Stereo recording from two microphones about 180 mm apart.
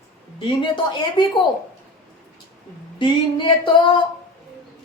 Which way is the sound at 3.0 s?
25° left (ahead or behind).